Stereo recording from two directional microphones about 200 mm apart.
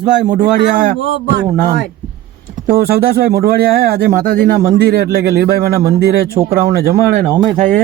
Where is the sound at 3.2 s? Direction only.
50° right (ahead or behind).